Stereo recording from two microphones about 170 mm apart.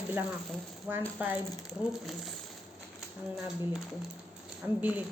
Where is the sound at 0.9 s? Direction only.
10° right (ahead or behind).